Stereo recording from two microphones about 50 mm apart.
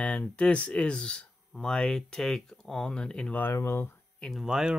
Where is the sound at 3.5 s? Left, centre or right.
Left.